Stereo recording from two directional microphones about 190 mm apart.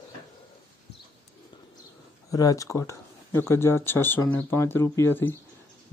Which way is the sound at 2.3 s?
20° left (ahead or behind).